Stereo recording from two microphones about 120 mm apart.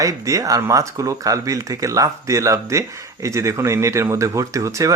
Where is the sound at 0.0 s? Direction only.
25° right (ahead or behind).